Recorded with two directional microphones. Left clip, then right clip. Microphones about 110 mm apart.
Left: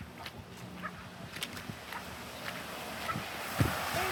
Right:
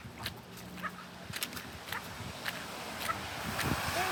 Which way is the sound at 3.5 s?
15° left (ahead or behind).